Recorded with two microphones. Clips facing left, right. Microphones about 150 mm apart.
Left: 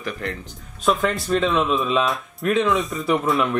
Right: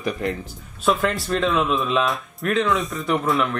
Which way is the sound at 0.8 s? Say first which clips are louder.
Even; centre (ahead or behind).